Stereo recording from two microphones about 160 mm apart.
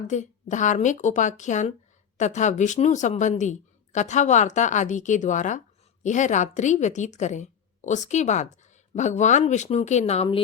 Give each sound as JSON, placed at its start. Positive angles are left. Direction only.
{"t": 0.1, "sound": "speech", "side_deg": 50}